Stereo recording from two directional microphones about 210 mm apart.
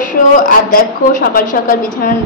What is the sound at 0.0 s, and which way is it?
A woman's voice, 40° left (ahead or behind).